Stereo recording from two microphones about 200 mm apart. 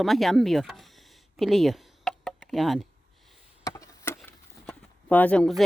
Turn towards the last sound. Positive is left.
turn(degrees=5)  # may be behind; listen again after turning